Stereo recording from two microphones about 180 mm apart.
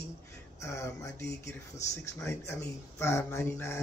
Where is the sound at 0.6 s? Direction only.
15° left (ahead or behind).